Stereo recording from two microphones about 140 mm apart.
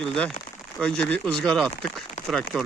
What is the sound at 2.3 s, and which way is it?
Speech, centre (ahead or behind).